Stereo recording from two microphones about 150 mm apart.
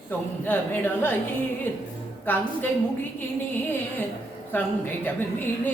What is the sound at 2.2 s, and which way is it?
Speech, 10° left (ahead or behind).